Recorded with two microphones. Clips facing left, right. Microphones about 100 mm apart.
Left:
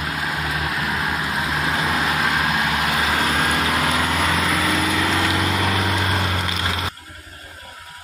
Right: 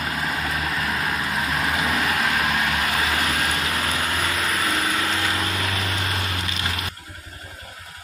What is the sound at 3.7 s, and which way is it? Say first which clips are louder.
Vehicle: left 5 dB; 90° left.